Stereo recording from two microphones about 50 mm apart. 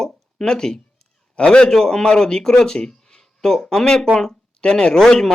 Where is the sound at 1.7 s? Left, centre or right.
Centre.